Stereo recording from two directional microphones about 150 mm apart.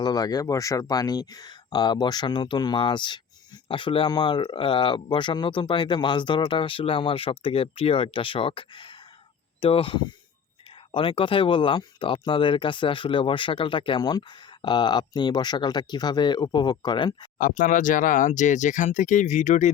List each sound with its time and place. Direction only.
0.0 s speech: 25° left (ahead or behind)
17.3 s speech: 60° left (ahead or behind)